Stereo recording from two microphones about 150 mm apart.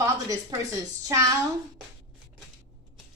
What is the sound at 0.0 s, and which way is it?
A woman's voice, 20° right (ahead or behind).